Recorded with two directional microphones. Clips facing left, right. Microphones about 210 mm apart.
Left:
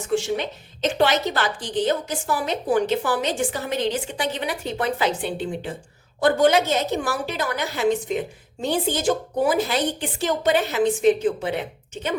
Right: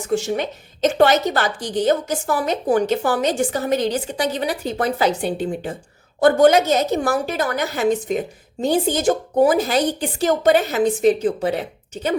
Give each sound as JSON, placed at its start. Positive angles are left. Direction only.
{"t": 0.1, "sound": "a woman's voice", "side_deg": -45}